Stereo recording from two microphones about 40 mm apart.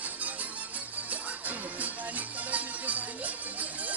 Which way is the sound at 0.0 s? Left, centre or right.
Right.